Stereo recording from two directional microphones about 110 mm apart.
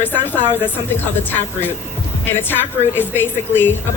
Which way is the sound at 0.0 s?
15° left (ahead or behind).